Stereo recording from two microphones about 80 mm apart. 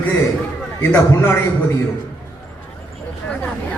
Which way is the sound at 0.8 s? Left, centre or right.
Left.